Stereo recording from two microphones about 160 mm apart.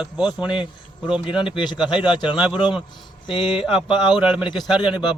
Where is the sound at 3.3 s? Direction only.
30° left (ahead or behind).